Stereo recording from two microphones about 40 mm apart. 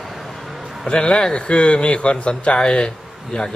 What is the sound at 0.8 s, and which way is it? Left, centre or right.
A man's voice, left.